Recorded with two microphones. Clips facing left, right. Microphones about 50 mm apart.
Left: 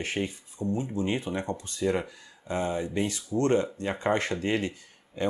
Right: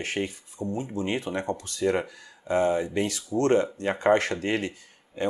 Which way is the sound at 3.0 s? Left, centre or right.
Right.